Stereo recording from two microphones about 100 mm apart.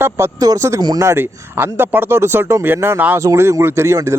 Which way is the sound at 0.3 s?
35° right (ahead or behind).